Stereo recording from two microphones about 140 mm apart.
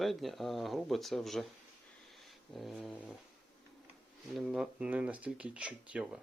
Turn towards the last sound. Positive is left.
turn(degrees=-10)  # may be behind; listen again after turning